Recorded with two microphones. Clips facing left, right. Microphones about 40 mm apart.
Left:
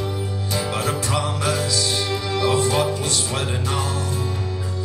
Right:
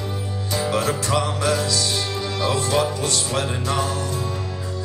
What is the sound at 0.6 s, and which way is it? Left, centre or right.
Music, left.